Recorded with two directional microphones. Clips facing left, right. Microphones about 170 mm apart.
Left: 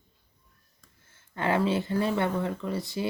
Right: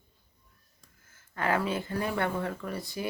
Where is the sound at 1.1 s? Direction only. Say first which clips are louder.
Left 2 dB; 25° left (ahead or behind).